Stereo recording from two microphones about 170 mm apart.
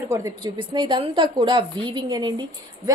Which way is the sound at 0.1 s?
20° right (ahead or behind).